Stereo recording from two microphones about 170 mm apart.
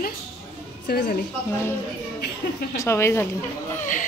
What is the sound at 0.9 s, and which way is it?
Speech, 70° left (ahead or behind).